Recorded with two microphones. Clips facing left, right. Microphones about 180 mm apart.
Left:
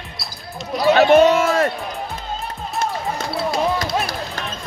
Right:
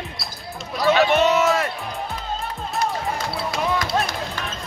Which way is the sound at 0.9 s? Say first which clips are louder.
Left 6 dB; 35° left (ahead or behind).